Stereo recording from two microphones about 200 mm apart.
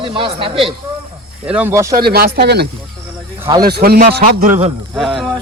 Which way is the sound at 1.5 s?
10° right (ahead or behind).